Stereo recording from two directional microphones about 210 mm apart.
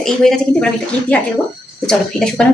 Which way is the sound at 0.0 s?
Centre (ahead or behind).